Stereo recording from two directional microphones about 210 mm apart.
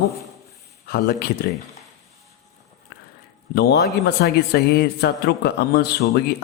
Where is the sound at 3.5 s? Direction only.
50° left (ahead or behind).